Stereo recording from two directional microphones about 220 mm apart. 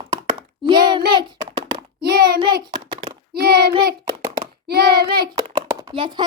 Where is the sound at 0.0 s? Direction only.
20° right (ahead or behind).